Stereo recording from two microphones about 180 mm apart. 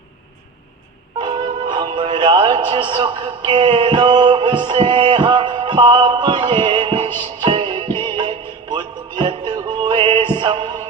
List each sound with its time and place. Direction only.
1.2 s music: 25° right (ahead or behind)